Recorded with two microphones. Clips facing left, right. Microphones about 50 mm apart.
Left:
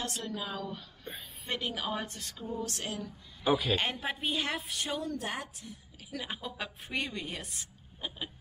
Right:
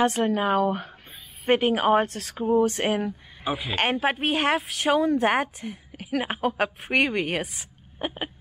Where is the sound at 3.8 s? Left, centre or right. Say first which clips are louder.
Right 10 dB; right.